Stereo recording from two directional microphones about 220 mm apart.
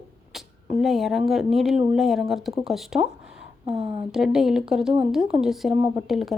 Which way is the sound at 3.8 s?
25° right (ahead or behind).